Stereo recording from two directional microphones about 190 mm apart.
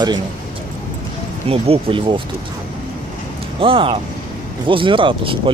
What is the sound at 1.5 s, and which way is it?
Speech, 30° right (ahead or behind).